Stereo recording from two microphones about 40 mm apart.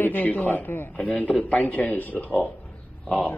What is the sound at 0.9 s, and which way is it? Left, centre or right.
A man's voice, left.